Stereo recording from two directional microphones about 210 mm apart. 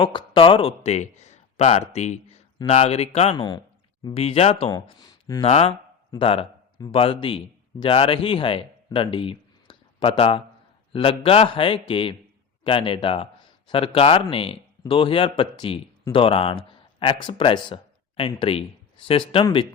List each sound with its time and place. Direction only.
0.0 s a man's voice: 25° left (ahead or behind)